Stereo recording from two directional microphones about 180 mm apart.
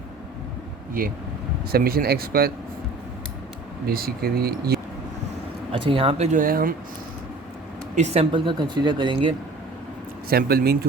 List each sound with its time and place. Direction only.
1.7 s speech: 55° right (ahead or behind)
3.8 s speech: 55° right (ahead or behind)
5.7 s speech: 30° right (ahead or behind); by 6.7 s 50° right (ahead or behind)
7.9 s speech: 35° right (ahead or behind)
10.2 s speech: 55° right (ahead or behind)